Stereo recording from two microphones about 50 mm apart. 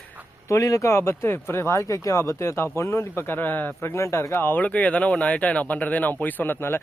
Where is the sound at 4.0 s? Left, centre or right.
Left.